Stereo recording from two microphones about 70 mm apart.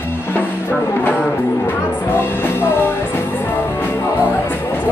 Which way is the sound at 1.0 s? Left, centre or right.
Left.